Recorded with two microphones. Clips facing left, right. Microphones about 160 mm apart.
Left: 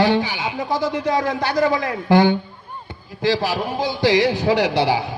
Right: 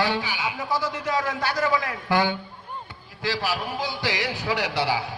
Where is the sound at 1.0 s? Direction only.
35° left (ahead or behind).